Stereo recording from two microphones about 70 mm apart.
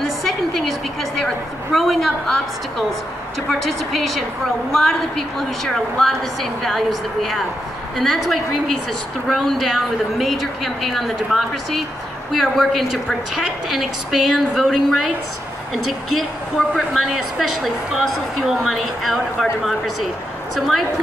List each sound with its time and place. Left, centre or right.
0.0 s a woman's voice: centre
3.4 s a woman's voice: centre
16.7 s a woman's voice: centre